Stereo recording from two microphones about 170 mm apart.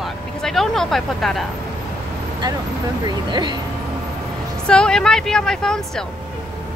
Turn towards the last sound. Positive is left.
turn(degrees=5)  # may be behind; listen again after turning